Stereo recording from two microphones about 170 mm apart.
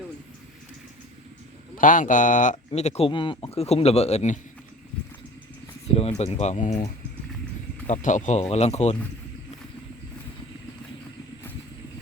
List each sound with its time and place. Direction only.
1.8 s speech: 50° left (ahead or behind)
5.9 s speech: 35° left (ahead or behind)